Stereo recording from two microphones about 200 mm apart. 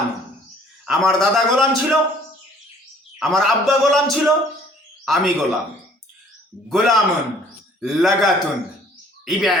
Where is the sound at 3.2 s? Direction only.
Centre (ahead or behind).